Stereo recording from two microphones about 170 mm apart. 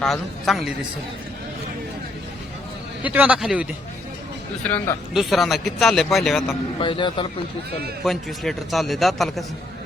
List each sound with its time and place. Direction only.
0.0 s a man's voice: centre (ahead or behind)
3.0 s speech: 10° right (ahead or behind)
4.6 s a man's voice: 10° left (ahead or behind)
6.7 s a man's voice: 30° left (ahead or behind)
8.0 s a man's voice: centre (ahead or behind)